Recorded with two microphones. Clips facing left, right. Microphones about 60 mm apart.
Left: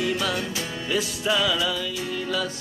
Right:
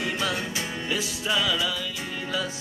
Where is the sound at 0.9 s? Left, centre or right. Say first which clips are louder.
Left 4 dB; centre.